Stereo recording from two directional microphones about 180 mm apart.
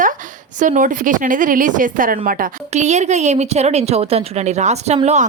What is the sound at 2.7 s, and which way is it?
A woman's voice, 40° right (ahead or behind).